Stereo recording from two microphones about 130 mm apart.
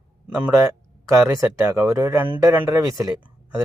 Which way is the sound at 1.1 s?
20° right (ahead or behind).